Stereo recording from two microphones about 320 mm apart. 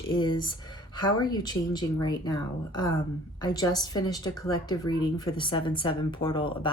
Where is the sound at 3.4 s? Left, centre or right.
Centre.